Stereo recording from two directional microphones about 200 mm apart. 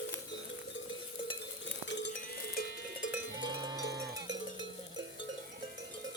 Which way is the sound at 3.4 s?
20° right (ahead or behind).